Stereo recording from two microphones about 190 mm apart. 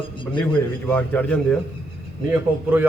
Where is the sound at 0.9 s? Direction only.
5° left (ahead or behind).